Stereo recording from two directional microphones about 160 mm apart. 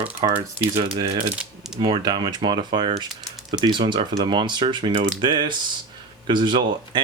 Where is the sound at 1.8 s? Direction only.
25° right (ahead or behind).